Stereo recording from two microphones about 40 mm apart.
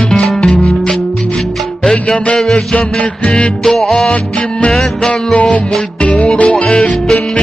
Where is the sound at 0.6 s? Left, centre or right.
Centre.